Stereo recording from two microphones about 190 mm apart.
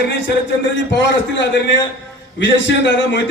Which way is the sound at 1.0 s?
70° left (ahead or behind).